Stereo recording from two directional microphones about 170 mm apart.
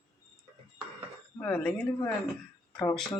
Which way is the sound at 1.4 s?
10° left (ahead or behind).